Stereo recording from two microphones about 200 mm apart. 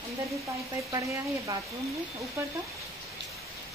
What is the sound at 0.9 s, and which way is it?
Speech, 20° right (ahead or behind).